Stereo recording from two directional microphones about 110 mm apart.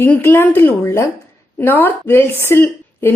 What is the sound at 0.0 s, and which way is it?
A woman's voice, 20° left (ahead or behind).